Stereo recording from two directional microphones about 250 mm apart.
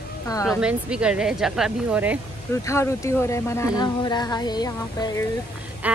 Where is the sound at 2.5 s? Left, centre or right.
Centre.